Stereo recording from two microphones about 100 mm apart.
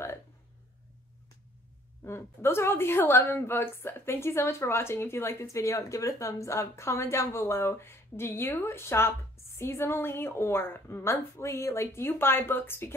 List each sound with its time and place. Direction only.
2.0 s a woman's voice: 25° left (ahead or behind)